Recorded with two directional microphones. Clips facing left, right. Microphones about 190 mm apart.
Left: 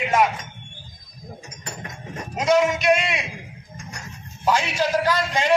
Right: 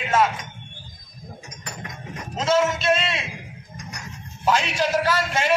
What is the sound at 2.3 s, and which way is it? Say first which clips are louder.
Speech: left 2 dB; 15° left (ahead or behind).